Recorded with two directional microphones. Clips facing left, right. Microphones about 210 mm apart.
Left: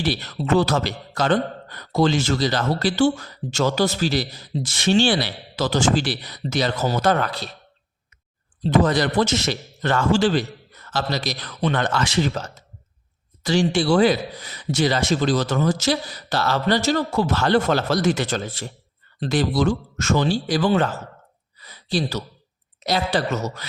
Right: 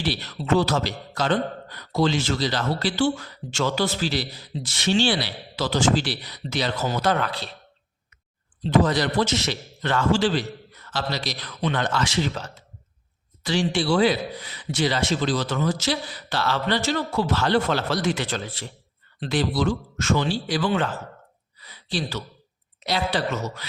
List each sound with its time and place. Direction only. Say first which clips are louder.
0.0 s speech: left 4 dB; 50° left (ahead or behind)
8.6 s speech: left 2 dB; 50° left (ahead or behind)
21.6 s a sound: left 5 dB; 40° left (ahead or behind)
22.8 s speech: left 3 dB; 45° left (ahead or behind)